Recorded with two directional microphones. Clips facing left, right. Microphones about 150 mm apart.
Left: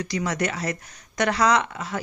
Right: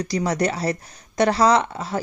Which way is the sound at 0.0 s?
35° right (ahead or behind).